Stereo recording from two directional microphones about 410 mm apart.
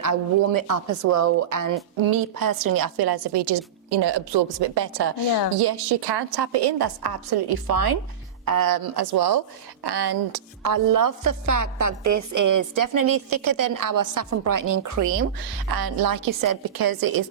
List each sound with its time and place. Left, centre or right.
0.0 s a woman's voice: right
15.7 s speech: right